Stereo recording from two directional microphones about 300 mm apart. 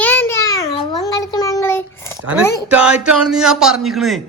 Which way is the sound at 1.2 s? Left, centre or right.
Centre.